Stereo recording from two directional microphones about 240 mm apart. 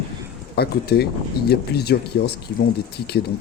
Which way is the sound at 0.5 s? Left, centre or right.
Left.